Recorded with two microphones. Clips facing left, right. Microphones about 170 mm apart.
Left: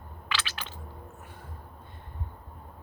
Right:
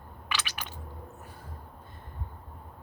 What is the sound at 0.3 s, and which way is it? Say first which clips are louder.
Squish: left 1 dB; 10° right (ahead or behind).